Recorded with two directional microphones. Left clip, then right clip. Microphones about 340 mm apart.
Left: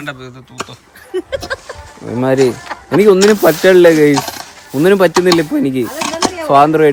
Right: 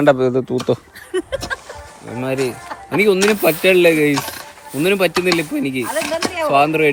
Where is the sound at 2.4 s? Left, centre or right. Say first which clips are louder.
Left 8 dB; centre.